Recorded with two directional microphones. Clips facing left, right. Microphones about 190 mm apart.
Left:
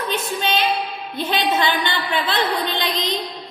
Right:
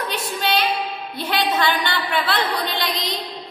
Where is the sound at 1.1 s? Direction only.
20° left (ahead or behind).